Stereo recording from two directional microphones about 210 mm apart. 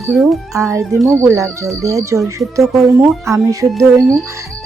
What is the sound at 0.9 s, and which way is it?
Speech, 5° left (ahead or behind).